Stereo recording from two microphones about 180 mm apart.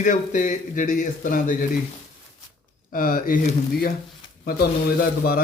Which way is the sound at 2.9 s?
50° left (ahead or behind).